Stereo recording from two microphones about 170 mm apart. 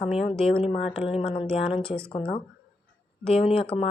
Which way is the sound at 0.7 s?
35° left (ahead or behind).